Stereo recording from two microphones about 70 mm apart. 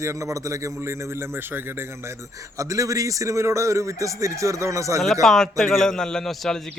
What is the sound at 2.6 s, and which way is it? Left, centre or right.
A man's voice, right.